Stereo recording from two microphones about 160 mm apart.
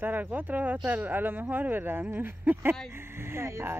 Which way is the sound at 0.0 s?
10° right (ahead or behind).